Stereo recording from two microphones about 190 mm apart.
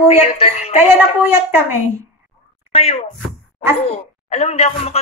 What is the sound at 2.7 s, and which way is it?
Speech, 30° left (ahead or behind).